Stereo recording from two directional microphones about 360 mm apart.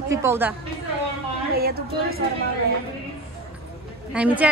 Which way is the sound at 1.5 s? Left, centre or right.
Right.